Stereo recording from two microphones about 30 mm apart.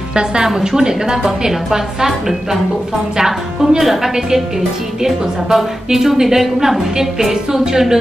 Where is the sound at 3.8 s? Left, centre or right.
Centre.